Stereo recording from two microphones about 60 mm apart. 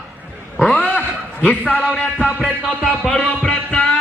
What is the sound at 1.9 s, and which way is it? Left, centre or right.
Music, centre.